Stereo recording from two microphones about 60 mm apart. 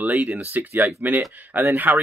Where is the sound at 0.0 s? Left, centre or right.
Right.